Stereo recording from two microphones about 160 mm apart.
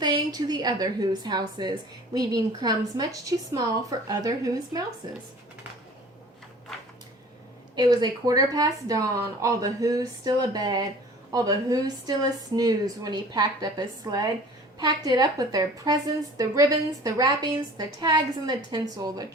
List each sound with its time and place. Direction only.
0.0 s speech: 25° right (ahead or behind)
7.8 s speech: 25° right (ahead or behind)